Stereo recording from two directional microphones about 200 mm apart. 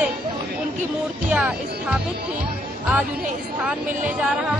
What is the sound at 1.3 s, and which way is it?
Speech, 5° right (ahead or behind).